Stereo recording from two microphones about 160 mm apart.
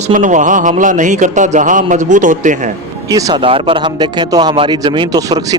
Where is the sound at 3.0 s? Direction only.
20° right (ahead or behind).